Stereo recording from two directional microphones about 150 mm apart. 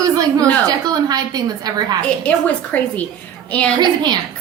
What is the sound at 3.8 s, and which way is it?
Speech, 30° right (ahead or behind).